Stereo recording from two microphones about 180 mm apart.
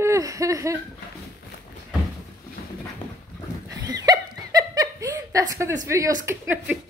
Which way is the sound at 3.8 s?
20° right (ahead or behind).